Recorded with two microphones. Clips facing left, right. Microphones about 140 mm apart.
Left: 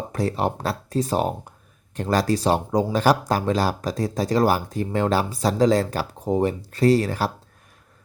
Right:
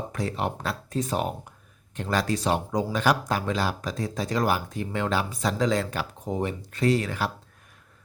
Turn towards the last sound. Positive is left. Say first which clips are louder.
# left 5 dB
turn(degrees=35)  # may be behind; listen again after turning